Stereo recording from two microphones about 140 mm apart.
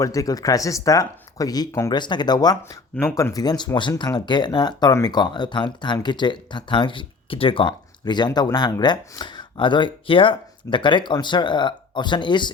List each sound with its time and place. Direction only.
0.0 s speech: 25° left (ahead or behind)